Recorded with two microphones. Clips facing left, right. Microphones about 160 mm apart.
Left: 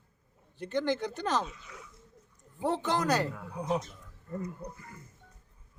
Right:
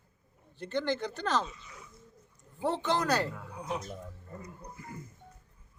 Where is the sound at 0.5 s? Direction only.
15° left (ahead or behind).